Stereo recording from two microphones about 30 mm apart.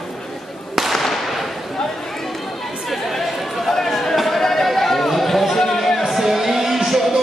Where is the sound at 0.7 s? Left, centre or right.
Centre.